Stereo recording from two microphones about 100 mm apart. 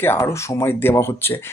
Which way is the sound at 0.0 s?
25° left (ahead or behind).